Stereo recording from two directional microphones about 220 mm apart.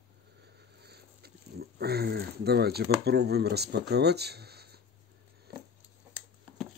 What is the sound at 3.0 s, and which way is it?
Speech, 45° right (ahead or behind).